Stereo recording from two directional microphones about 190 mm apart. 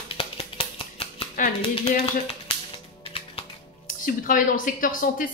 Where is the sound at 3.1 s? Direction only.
30° left (ahead or behind).